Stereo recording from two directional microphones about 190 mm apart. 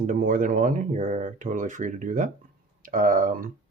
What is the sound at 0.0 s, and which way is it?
Speech, 45° right (ahead or behind).